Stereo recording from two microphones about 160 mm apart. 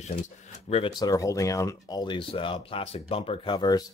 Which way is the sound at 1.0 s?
20° left (ahead or behind).